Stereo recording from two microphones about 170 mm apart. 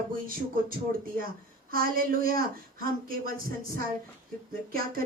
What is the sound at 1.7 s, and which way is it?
Speech, 60° right (ahead or behind).